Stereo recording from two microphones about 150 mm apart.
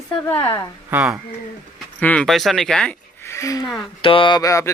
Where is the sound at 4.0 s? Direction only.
35° left (ahead or behind).